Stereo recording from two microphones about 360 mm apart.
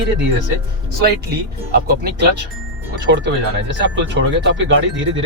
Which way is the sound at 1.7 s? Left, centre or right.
Right.